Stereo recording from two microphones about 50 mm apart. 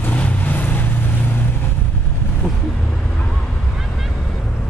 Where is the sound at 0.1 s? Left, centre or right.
Left.